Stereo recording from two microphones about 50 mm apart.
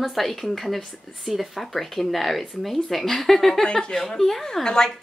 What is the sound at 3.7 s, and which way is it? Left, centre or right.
Speech, centre.